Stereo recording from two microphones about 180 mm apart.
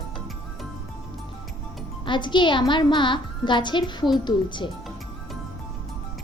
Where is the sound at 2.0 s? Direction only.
25° left (ahead or behind).